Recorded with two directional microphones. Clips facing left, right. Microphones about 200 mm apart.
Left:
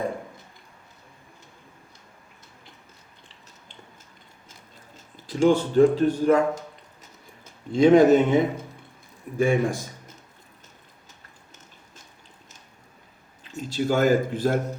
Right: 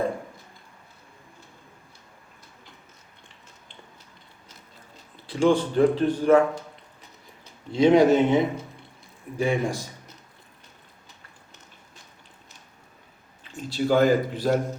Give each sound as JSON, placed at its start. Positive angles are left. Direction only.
{"t": 5.2, "sound": "speech", "side_deg": 40}
{"t": 7.0, "sound": "a sound", "side_deg": 50}
{"t": 9.4, "sound": "speech", "side_deg": 50}
{"t": 13.5, "sound": "speech", "side_deg": 45}